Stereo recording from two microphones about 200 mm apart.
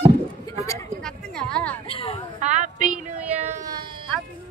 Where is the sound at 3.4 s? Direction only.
35° right (ahead or behind).